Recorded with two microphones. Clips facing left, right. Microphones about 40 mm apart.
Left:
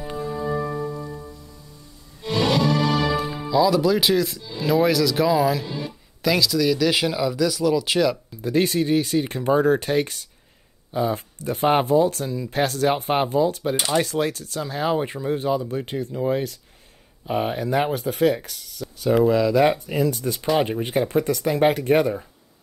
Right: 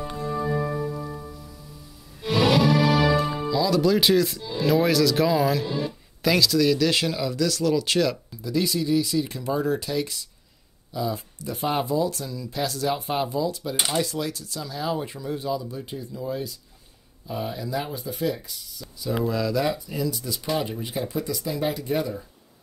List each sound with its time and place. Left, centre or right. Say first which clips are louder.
0.3 s music: right 1 dB; centre
4.4 s speech: left 1 dB; centre
8.4 s speech: left 5 dB; left
15.7 s speech: left 7 dB; left
19.2 s speech: left 5 dB; left
19.5 s speech: left 7 dB; left